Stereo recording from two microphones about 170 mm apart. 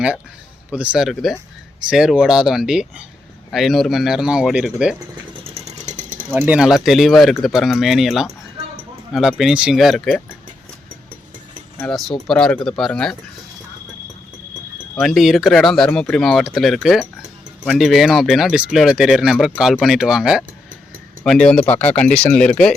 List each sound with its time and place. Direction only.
0.7 s speech: 5° right (ahead or behind)
5.4 s vehicle: 35° right (ahead or behind)
6.3 s speech: 10° right (ahead or behind)
11.9 s speech: centre (ahead or behind)
14.9 s speech: centre (ahead or behind)